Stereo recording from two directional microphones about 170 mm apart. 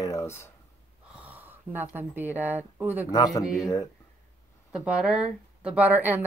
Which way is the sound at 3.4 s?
5° right (ahead or behind).